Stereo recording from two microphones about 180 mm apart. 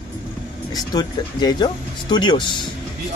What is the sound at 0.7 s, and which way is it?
Speech, 20° left (ahead or behind).